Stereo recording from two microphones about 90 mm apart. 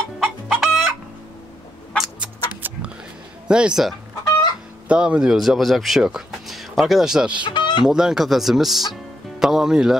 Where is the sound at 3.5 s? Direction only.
10° right (ahead or behind).